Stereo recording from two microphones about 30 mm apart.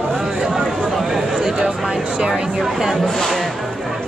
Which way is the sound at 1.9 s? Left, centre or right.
Right.